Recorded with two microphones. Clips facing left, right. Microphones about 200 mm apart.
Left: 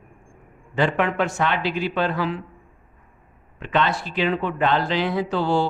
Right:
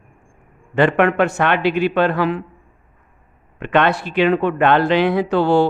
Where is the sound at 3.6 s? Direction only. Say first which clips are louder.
Right 6 dB; 60° right (ahead or behind).